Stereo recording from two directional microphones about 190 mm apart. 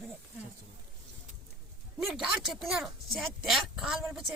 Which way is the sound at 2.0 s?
Centre (ahead or behind).